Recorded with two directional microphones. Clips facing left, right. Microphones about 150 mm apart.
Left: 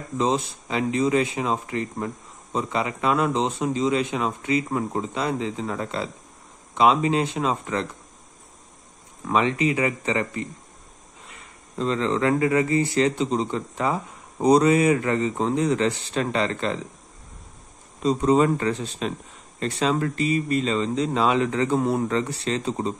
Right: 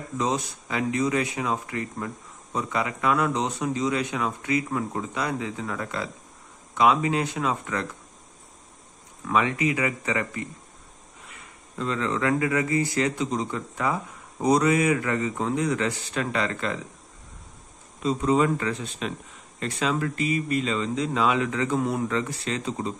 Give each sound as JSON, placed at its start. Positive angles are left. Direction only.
{"t": 0.2, "sound": "speech", "side_deg": 25}
{"t": 9.3, "sound": "speech", "side_deg": 25}
{"t": 11.8, "sound": "speech", "side_deg": 30}
{"t": 18.0, "sound": "speech", "side_deg": 35}